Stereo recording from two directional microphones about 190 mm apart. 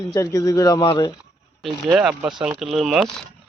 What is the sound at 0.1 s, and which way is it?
Speech, 20° left (ahead or behind).